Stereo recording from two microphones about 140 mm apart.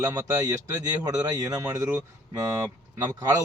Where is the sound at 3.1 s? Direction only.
25° right (ahead or behind).